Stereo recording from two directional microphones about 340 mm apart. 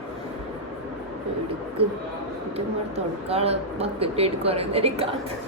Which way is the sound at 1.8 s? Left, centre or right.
Centre.